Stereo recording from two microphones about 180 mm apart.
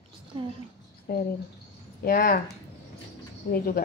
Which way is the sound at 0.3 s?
25° right (ahead or behind).